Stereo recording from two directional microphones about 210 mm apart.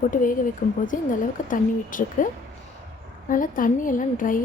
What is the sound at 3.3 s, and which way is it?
A woman's voice, 40° left (ahead or behind).